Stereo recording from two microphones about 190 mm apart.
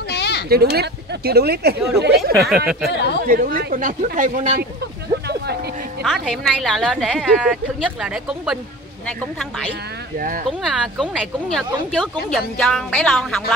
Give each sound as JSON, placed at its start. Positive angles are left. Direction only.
{"t": 0.1, "sound": "a sound", "side_deg": 60}
{"t": 0.5, "sound": "speech", "side_deg": -55}
{"t": 2.4, "sound": "speech", "side_deg": 0}
{"t": 2.9, "sound": "speech", "side_deg": 65}
{"t": 3.3, "sound": "speech", "side_deg": -50}
{"t": 6.0, "sound": "speech", "side_deg": 0}
{"t": 10.1, "sound": "speech", "side_deg": -45}
{"t": 10.6, "sound": "speech", "side_deg": 0}